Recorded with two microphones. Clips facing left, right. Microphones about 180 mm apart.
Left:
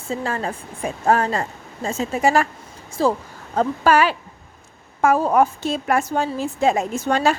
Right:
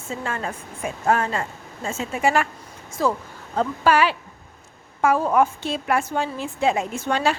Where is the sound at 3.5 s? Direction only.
45° left (ahead or behind).